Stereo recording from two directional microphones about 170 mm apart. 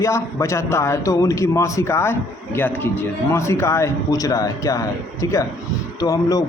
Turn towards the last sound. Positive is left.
turn(degrees=20)  # may be behind; listen again after turning